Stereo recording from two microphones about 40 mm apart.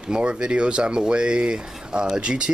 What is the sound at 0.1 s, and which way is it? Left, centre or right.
Speech, right.